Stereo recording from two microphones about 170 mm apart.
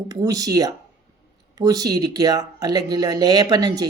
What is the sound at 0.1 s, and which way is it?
Speech, 20° right (ahead or behind).